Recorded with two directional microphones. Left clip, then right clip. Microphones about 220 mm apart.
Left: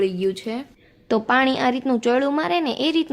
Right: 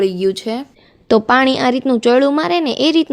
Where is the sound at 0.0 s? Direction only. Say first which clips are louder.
Right 6 dB; 30° right (ahead or behind).